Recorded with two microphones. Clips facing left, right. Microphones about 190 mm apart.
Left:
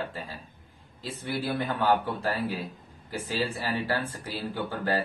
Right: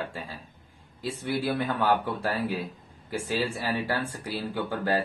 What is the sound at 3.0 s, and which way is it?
A man's voice, 15° right (ahead or behind).